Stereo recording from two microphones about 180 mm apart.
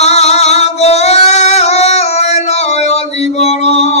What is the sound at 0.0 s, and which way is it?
Singing, 35° left (ahead or behind).